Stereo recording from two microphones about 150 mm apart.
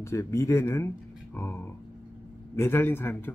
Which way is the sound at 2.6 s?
15° left (ahead or behind).